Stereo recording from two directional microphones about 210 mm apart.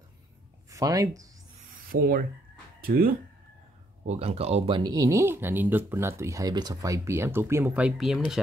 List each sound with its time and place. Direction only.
0.7 s speech: 15° right (ahead or behind)
1.9 s a sound: 45° right (ahead or behind)
4.0 s speech: 30° right (ahead or behind); by 8.4 s centre (ahead or behind)